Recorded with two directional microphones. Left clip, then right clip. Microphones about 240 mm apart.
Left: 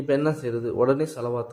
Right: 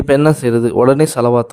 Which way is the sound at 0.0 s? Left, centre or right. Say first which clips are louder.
Right 12 dB; right.